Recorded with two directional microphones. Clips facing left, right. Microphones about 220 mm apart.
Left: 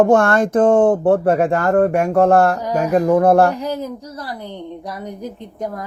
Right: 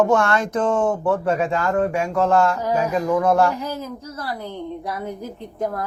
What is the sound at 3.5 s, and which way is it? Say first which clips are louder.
A woman's voice: left 4 dB; 15° left (ahead or behind).